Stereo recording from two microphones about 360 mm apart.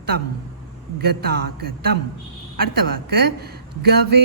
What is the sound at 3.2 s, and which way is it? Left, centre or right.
Speech, right.